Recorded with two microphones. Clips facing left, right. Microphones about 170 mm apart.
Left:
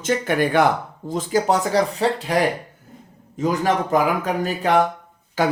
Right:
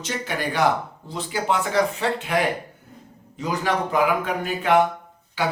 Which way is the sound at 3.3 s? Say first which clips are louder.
Left 4 dB; 45° left (ahead or behind).